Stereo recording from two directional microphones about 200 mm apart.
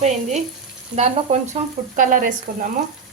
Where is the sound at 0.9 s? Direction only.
35° right (ahead or behind).